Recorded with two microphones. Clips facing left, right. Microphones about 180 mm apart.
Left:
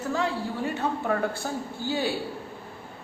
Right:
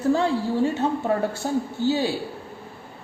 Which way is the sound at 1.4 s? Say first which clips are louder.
Right 8 dB; 25° right (ahead or behind).